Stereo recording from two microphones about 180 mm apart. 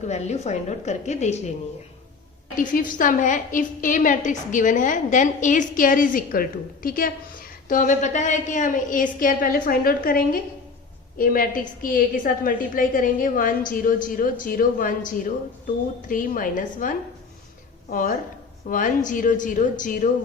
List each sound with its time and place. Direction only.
0.1 s a woman's voice: 40° left (ahead or behind)
2.6 s a woman's voice: 50° left (ahead or behind)